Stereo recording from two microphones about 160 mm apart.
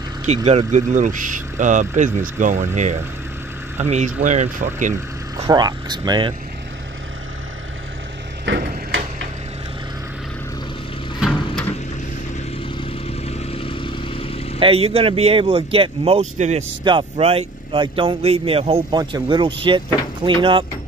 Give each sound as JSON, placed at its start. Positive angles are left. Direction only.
{"t": 0.5, "sound": "speech", "side_deg": -45}
{"t": 5.5, "sound": "speech", "side_deg": -25}
{"t": 8.5, "sound": "a sound", "side_deg": -90}
{"t": 11.1, "sound": "a sound", "side_deg": -5}
{"t": 12.8, "sound": "vehicle", "side_deg": 40}
{"t": 14.6, "sound": "speech", "side_deg": -35}
{"t": 16.8, "sound": "speech", "side_deg": -35}
{"t": 18.9, "sound": "speech", "side_deg": -25}